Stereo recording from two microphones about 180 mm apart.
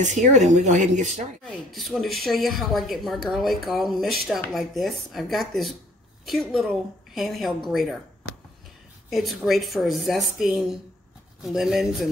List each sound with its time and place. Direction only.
0.0 s speech: 40° right (ahead or behind)
1.4 s a woman's voice: centre (ahead or behind)
9.1 s a woman's voice: centre (ahead or behind)